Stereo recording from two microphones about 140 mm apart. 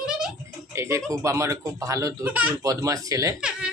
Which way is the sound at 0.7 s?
20° right (ahead or behind).